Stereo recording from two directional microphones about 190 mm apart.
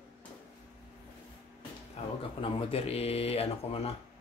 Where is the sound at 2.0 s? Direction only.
35° left (ahead or behind).